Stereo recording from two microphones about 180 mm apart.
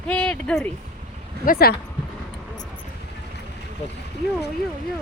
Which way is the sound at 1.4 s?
55° left (ahead or behind).